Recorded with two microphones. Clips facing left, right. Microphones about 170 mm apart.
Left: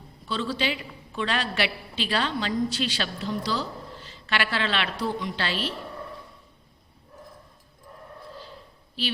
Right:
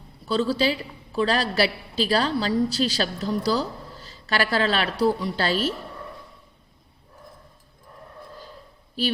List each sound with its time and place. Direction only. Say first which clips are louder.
0.3 s a woman's voice: right 6 dB; 40° right (ahead or behind)